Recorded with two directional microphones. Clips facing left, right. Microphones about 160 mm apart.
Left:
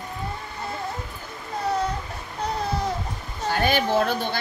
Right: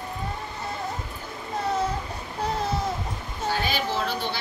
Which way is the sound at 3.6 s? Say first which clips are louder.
Left 6 dB; 55° left (ahead or behind).